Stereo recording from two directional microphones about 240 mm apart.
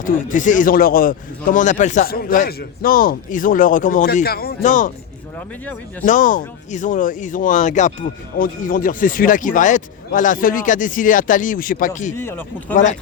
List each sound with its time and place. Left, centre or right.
0.0 s speech: left
6.1 s speech: left
12.1 s speech: centre
12.7 s speech: left